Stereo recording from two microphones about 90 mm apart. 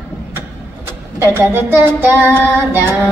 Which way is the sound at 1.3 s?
25° right (ahead or behind).